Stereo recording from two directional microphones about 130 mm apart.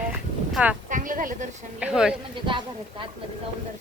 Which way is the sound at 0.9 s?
90° right.